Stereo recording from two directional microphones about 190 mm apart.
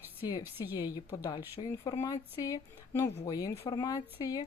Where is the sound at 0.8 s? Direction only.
20° left (ahead or behind).